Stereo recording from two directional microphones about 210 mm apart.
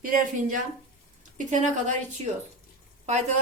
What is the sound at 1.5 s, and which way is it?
Speech, 35° right (ahead or behind).